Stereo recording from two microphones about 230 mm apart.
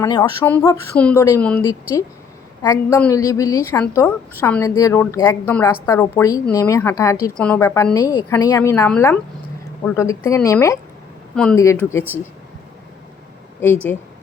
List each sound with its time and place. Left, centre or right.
0.0 s a woman's voice: centre
2.6 s a woman's voice: centre
13.6 s a woman's voice: centre